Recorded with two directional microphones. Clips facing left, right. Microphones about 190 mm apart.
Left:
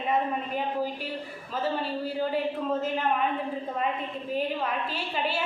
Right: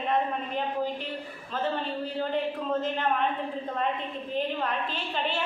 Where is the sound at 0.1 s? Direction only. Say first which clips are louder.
Left 1 dB; 5° left (ahead or behind).